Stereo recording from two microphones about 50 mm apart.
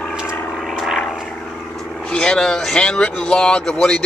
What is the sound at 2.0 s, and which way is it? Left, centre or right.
Speech, centre.